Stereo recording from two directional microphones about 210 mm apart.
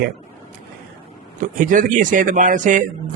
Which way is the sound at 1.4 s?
40° right (ahead or behind).